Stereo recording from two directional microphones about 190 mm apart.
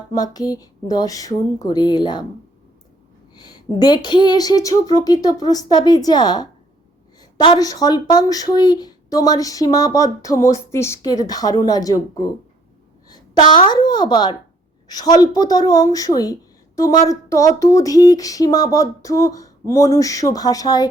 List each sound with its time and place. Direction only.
0.1 s a woman's voice: 20° left (ahead or behind)
3.3 s a woman's voice: 20° left (ahead or behind)